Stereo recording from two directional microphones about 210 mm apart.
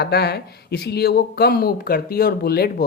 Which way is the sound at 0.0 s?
50° left (ahead or behind).